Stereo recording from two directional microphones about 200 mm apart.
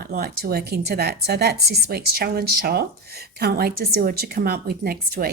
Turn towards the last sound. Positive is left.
turn(degrees=-50)  # may be behind; listen again after turning